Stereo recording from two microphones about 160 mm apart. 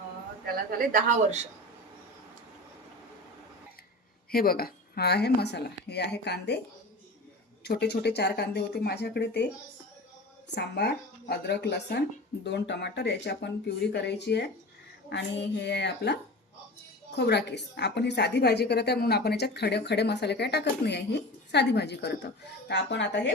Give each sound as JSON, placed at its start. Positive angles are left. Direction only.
{"t": 4.3, "sound": "a woman's voice", "side_deg": 70}
{"t": 7.6, "sound": "a woman's voice", "side_deg": 90}
{"t": 10.5, "sound": "a woman's voice", "side_deg": 90}
{"t": 17.2, "sound": "a woman's voice", "side_deg": 90}